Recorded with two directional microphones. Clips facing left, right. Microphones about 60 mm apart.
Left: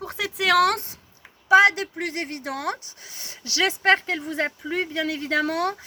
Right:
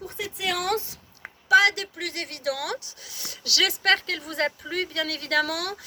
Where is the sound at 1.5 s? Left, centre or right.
Left.